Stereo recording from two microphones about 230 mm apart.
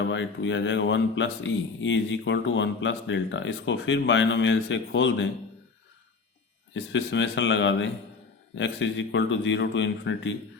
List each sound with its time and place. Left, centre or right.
0.0 s a man's voice: left
6.7 s a man's voice: left